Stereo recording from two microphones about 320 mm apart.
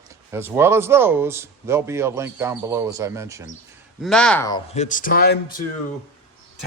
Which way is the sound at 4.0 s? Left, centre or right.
Centre.